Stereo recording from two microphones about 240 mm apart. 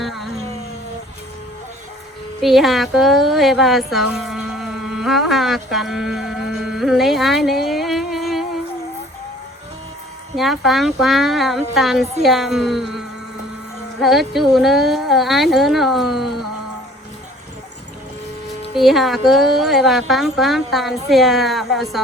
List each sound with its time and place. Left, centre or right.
0.0 s a sound: centre
2.4 s speech: centre
10.3 s speech: centre
18.8 s speech: centre